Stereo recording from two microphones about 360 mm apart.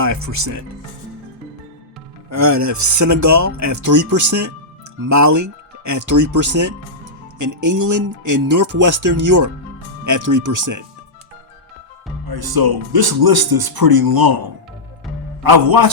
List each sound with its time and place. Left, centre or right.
0.0 s speech: right
2.3 s speech: right
12.3 s speech: right
15.4 s a man's voice: right